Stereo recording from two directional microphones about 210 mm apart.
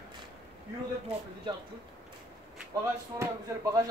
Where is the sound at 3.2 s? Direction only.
15° right (ahead or behind).